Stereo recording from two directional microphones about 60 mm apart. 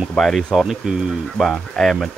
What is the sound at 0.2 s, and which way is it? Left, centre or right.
Speech, centre.